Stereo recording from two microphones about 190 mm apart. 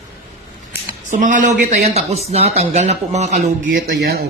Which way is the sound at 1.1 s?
40° right (ahead or behind).